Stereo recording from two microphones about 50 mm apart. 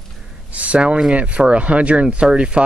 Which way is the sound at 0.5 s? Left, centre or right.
Right.